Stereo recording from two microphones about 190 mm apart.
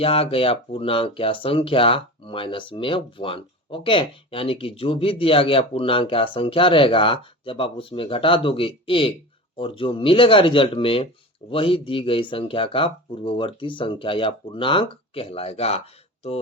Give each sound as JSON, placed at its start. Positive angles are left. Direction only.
{"t": 0.0, "sound": "speech", "side_deg": 30}